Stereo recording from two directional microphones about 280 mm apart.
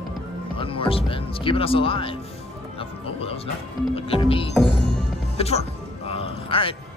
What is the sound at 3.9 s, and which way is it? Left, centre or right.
Speech, centre.